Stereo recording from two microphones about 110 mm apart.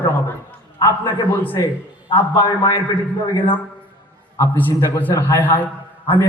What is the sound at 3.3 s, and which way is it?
Speech, 50° left (ahead or behind).